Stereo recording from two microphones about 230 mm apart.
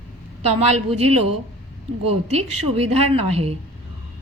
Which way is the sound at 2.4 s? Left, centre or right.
Right.